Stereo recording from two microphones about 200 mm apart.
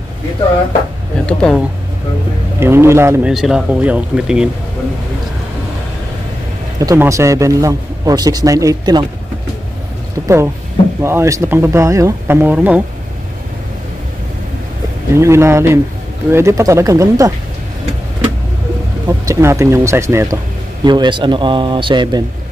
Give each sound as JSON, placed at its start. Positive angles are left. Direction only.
{"t": 1.2, "sound": "speech", "side_deg": 5}
{"t": 2.6, "sound": "a man's voice", "side_deg": -10}
{"t": 3.3, "sound": "speech", "side_deg": 0}
{"t": 6.8, "sound": "a man's voice", "side_deg": -15}
{"t": 10.2, "sound": "a man's voice", "side_deg": -15}
{"t": 15.1, "sound": "a man's voice", "side_deg": -15}
{"t": 19.0, "sound": "a man's voice", "side_deg": -15}